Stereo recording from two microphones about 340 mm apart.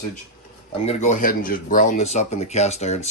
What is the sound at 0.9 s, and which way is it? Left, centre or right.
Speech, left.